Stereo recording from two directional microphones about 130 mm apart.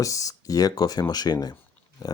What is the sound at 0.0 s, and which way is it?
Speech, 25° left (ahead or behind).